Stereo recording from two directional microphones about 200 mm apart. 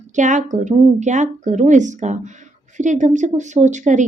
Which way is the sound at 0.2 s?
40° right (ahead or behind).